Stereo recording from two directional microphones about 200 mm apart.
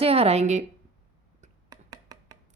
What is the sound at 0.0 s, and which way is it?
Speech, 30° right (ahead or behind).